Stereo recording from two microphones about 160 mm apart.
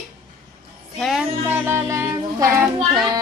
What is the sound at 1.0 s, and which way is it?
Speech, centre (ahead or behind).